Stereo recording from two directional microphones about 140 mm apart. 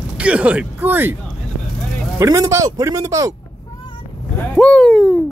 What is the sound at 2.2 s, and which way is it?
Speech, 20° right (ahead or behind).